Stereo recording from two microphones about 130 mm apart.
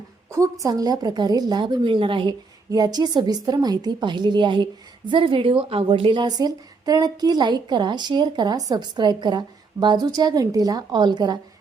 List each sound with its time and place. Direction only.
0.6 s speech: 30° right (ahead or behind)
2.6 s speech: 30° right (ahead or behind)